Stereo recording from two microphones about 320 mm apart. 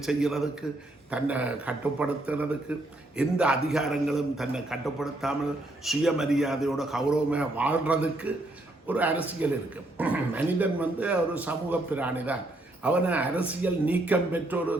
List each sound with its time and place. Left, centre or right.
0.0 s a man's voice: centre